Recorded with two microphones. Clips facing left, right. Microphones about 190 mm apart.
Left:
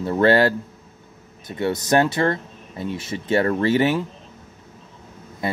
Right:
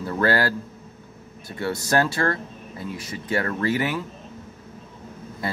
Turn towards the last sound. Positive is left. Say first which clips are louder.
# left 4 dB
turn(degrees=20)  # may be behind; listen again after turning